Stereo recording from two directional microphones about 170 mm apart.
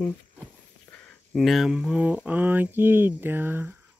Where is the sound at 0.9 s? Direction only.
5° left (ahead or behind).